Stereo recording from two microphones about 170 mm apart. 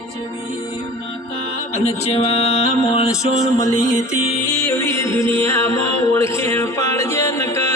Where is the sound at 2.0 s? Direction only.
35° left (ahead or behind).